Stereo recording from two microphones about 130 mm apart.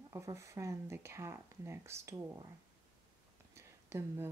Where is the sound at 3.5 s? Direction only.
20° right (ahead or behind).